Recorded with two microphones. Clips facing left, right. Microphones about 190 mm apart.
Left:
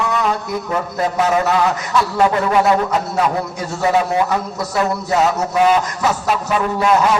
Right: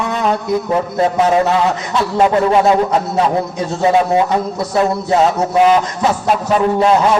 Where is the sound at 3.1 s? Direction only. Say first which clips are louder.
Right 3 dB; 25° right (ahead or behind).